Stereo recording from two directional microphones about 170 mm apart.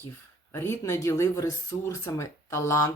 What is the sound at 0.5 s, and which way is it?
Speech, 15° left (ahead or behind).